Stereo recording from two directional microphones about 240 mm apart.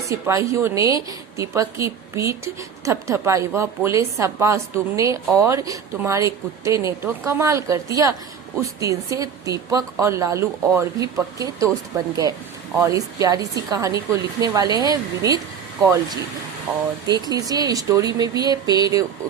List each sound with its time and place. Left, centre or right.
0.1 s a woman's voice: centre
17.1 s a woman's voice: centre